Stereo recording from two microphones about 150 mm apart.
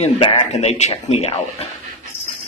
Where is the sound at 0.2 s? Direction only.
45° left (ahead or behind).